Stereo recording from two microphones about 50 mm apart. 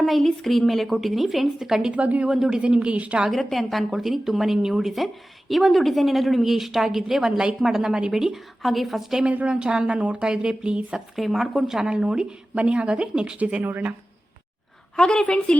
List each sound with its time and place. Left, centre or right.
0.0 s a woman's voice: centre
1.9 s a woman's voice: right
2.3 s a woman's voice: centre
2.6 s a woman's voice: right
3.3 s a woman's voice: centre
8.1 s a woman's voice: centre
9.3 s a woman's voice: right
9.6 s a woman's voice: centre
11.1 s a woman's voice: centre; by 13.6 s right
13.6 s speech: right
14.9 s a woman's voice: centre
15.2 s a woman's voice: left